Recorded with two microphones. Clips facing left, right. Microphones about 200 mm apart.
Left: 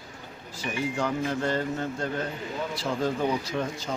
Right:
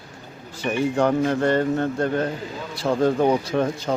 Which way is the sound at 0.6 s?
65° right (ahead or behind).